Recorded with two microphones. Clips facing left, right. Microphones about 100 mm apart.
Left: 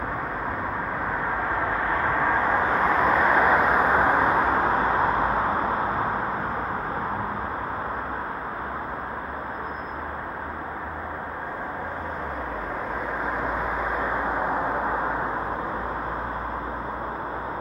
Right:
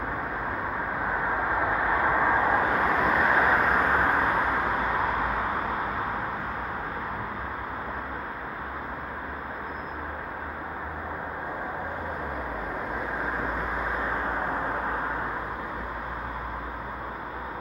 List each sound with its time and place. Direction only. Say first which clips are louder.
1.5 s vehicle: even; 15° right (ahead or behind)
2.7 s vehicle: left 3 dB; 30° left (ahead or behind)
3.3 s a sound: left 3 dB; 5° left (ahead or behind); by 6.0 s 30° left (ahead or behind)